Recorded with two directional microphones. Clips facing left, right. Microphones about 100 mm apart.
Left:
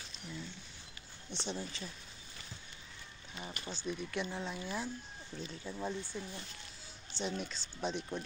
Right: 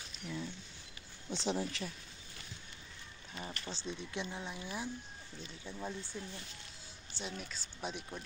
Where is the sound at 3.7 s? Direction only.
30° right (ahead or behind).